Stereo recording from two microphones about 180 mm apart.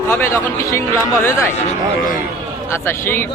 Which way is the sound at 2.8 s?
10° left (ahead or behind).